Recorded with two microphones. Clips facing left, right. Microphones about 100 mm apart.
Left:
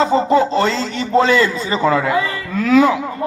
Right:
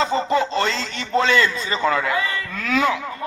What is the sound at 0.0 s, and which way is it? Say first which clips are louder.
A man's voice: left 6 dB; 20° left (ahead or behind).